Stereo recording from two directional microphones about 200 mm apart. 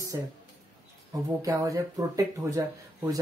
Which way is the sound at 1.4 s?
15° right (ahead or behind).